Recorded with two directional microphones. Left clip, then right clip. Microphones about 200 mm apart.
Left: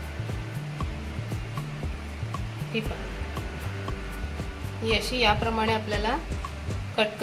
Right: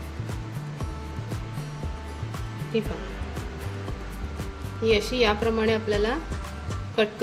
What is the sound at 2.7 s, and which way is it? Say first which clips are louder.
Speech: right 4 dB; 50° right (ahead or behind).